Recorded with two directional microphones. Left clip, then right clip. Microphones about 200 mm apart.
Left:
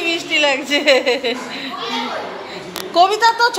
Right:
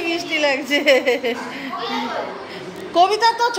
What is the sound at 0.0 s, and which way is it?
A woman's voice, 5° right (ahead or behind).